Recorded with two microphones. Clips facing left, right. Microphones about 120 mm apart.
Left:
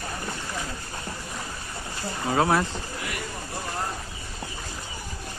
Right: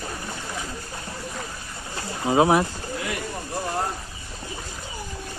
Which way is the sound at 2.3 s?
20° right (ahead or behind).